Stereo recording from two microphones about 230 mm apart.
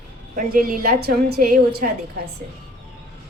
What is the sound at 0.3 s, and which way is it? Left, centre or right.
Speech, right.